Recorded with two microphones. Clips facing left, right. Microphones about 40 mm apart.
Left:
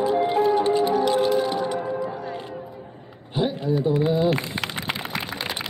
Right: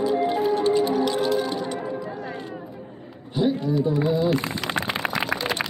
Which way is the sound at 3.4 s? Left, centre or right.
Left.